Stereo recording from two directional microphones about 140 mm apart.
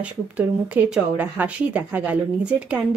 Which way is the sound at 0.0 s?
10° right (ahead or behind).